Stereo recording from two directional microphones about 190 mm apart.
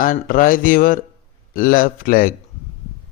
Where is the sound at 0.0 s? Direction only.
45° left (ahead or behind).